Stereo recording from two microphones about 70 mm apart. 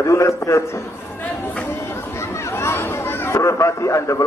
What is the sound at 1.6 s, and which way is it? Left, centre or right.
Chatter, left.